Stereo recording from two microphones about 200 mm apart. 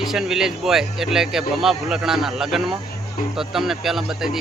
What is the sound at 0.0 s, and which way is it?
Speech, centre (ahead or behind).